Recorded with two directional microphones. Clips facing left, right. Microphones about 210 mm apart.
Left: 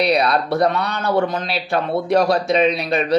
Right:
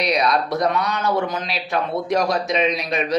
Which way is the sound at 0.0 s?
30° left (ahead or behind).